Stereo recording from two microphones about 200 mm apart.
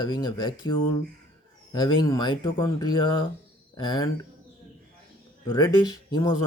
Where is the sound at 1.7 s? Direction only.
20° left (ahead or behind).